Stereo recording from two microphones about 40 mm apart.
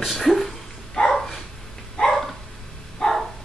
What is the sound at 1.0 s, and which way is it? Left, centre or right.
Dog, centre.